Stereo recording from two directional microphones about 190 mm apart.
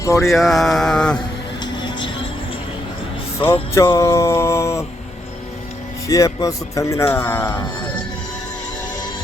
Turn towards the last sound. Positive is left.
turn(degrees=10)  # may be behind; listen again after turning